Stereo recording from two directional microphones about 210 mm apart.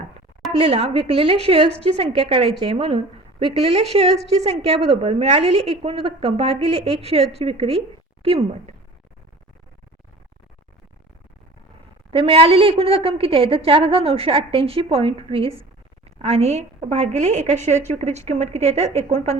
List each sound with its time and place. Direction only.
0.6 s a woman's voice: 30° right (ahead or behind)
12.1 s a woman's voice: 25° right (ahead or behind)